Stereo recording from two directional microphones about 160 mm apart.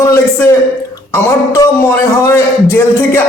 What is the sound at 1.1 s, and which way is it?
A man's voice, 15° left (ahead or behind).